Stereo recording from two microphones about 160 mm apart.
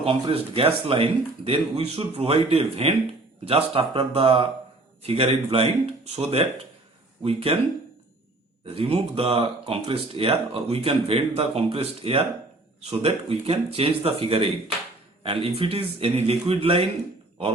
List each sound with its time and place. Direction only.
0.0 s speech: 35° right (ahead or behind)
8.6 s speech: 35° right (ahead or behind)